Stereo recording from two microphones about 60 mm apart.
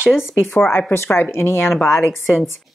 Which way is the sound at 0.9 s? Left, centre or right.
Left.